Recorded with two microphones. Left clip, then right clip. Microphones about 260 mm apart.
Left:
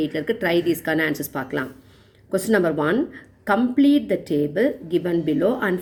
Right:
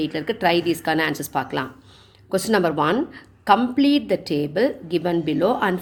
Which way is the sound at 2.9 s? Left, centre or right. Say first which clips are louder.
Even; right.